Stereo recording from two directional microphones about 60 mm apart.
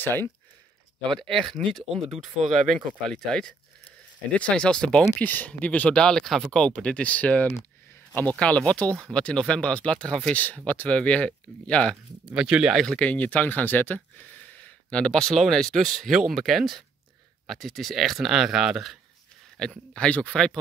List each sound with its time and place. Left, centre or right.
0.0 s speech: left
1.1 s speech: centre
5.2 s speech: left
7.9 s a sound: left
8.4 s speech: centre
10.3 s speech: left
12.3 s speech: centre
12.7 s speech: centre
13.0 s speech: left; by 18.9 s centre
19.5 s speech: centre